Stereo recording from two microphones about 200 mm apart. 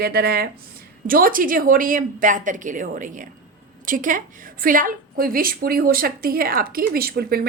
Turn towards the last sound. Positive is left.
turn(degrees=-50)  # may be behind; listen again after turning